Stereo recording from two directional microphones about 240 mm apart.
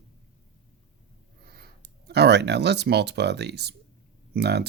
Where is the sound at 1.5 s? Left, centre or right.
Right.